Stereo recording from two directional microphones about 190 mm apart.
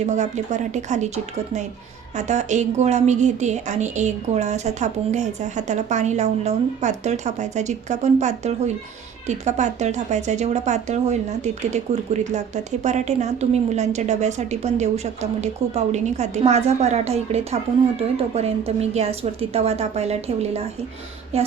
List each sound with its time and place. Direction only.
0.0 s speech: 40° right (ahead or behind)